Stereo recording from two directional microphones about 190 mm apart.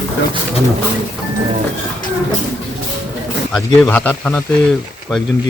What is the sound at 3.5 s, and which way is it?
Speech, 5° left (ahead or behind).